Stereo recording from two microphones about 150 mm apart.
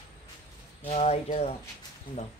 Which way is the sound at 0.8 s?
45° left (ahead or behind).